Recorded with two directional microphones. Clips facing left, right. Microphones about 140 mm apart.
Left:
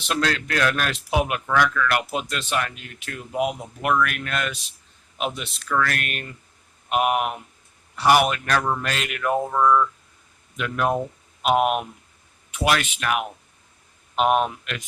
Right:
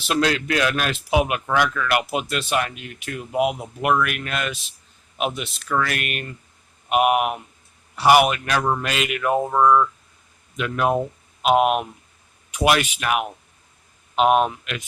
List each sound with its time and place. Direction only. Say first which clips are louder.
0.1 s speech: right 3 dB; 10° right (ahead or behind)
1.5 s speech: even; 15° right (ahead or behind)
14.2 s speech: right 3 dB; 5° right (ahead or behind)